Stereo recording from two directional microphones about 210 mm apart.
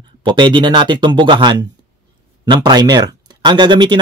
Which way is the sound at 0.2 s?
20° right (ahead or behind).